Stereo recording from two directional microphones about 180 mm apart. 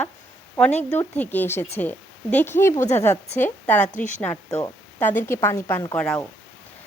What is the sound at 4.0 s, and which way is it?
Speech, 40° left (ahead or behind).